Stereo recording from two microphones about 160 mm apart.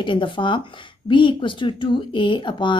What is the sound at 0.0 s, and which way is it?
A woman's voice, 30° left (ahead or behind).